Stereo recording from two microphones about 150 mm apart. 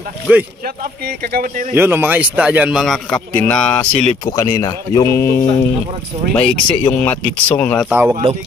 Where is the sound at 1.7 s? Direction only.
15° right (ahead or behind); by 3.8 s 5° left (ahead or behind).